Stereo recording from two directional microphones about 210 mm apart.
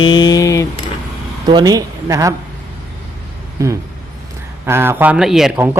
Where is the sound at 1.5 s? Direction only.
20° right (ahead or behind).